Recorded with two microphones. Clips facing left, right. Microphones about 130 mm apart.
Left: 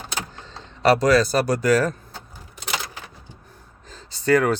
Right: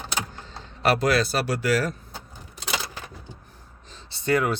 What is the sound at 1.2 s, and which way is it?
Speech, 40° left (ahead or behind).